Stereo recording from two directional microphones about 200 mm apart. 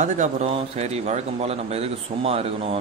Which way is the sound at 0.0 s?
35° right (ahead or behind).